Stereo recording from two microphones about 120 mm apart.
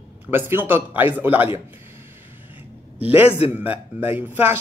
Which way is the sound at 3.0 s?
15° right (ahead or behind).